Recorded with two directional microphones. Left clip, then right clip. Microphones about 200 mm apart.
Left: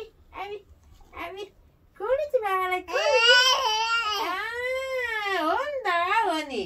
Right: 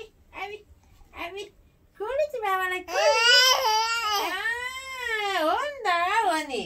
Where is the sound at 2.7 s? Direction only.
20° right (ahead or behind).